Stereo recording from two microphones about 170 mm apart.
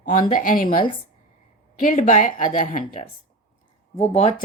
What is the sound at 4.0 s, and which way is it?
Speech, 40° left (ahead or behind).